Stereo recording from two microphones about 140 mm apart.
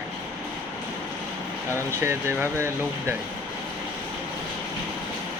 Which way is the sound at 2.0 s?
15° right (ahead or behind).